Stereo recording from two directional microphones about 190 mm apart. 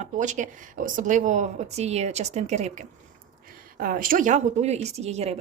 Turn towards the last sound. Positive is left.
turn(degrees=-35)  # may be behind; listen again after turning